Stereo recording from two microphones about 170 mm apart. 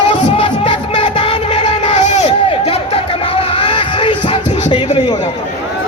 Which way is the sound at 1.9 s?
45° left (ahead or behind).